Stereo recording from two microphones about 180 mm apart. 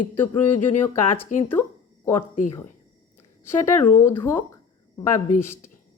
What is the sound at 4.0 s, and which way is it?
Speech, 15° left (ahead or behind).